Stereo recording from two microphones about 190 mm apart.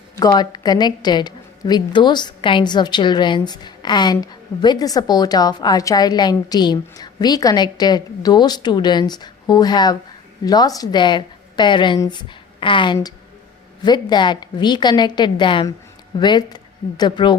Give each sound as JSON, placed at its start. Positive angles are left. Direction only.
{"t": 0.2, "sound": "a woman's voice", "side_deg": 20}